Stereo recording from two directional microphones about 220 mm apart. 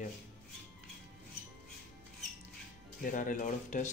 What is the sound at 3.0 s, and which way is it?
Speech, 35° left (ahead or behind).